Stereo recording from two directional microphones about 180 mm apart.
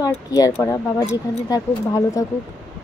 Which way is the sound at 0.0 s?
20° left (ahead or behind).